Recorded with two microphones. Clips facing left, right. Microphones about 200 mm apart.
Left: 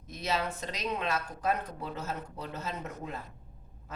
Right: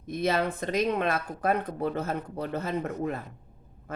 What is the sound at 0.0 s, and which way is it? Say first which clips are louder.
Speech: right 7 dB; 55° right (ahead or behind).